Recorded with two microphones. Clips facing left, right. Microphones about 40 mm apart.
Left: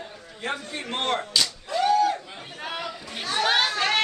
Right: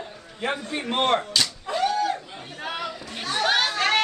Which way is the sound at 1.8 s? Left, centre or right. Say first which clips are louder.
Left 3 dB; centre.